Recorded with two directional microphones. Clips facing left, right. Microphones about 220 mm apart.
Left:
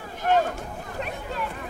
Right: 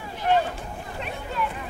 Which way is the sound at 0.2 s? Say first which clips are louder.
Even; 45° left (ahead or behind).